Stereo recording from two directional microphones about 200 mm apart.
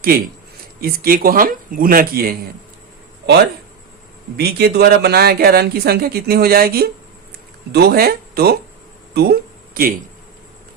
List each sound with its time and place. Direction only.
0.8 s speech: 50° right (ahead or behind)
4.4 s speech: 55° right (ahead or behind)
9.1 s a sound: 50° right (ahead or behind)